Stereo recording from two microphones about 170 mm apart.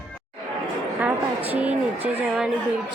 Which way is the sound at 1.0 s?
10° right (ahead or behind).